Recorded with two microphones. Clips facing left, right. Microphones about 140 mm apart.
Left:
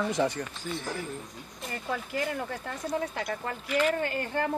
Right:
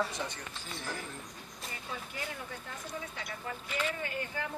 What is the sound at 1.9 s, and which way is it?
Speech, 75° left (ahead or behind).